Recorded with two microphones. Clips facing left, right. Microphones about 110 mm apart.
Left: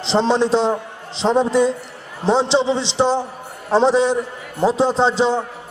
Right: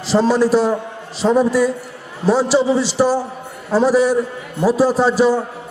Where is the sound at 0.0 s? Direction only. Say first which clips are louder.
Right 2 dB; 25° left (ahead or behind).